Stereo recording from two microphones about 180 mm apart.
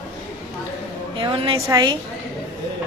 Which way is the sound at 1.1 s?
30° right (ahead or behind).